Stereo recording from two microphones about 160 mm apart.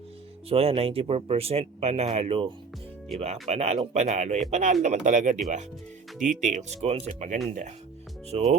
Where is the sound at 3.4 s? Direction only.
45° right (ahead or behind).